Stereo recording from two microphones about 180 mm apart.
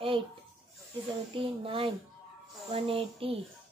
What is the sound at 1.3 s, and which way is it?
Speech, 30° right (ahead or behind).